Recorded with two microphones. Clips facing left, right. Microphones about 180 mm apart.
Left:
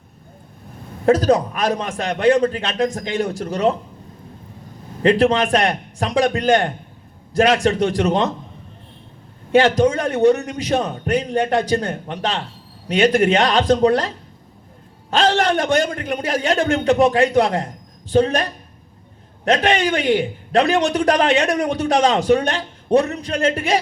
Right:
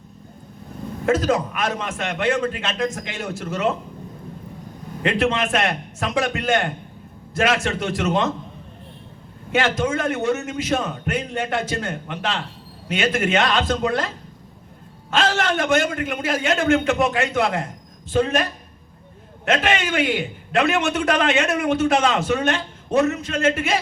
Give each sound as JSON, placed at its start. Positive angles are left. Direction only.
{"t": 1.0, "sound": "a man's voice", "side_deg": 35}
{"t": 5.0, "sound": "a man's voice", "side_deg": 35}
{"t": 9.5, "sound": "a man's voice", "side_deg": 35}
{"t": 15.1, "sound": "a man's voice", "side_deg": 35}
{"t": 19.5, "sound": "a man's voice", "side_deg": 35}